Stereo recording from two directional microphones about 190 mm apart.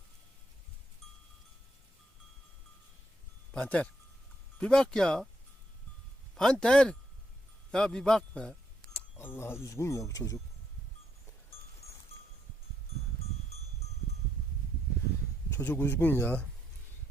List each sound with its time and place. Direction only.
3.5 s speech: 5° left (ahead or behind)
6.3 s speech: 5° left (ahead or behind)
11.8 s sheep: 30° left (ahead or behind)
15.6 s speech: 10° left (ahead or behind)